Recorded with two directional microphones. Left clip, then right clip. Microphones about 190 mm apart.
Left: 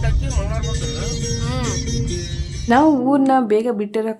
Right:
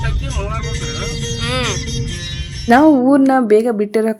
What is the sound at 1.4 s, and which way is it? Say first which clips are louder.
Speech: right 6 dB; 15° right (ahead or behind).